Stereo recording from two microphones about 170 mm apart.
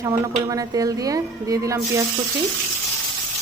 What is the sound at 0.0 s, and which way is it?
A woman's voice, 20° right (ahead or behind).